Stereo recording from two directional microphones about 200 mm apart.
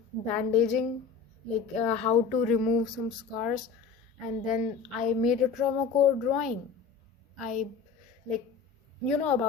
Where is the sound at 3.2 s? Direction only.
Centre (ahead or behind).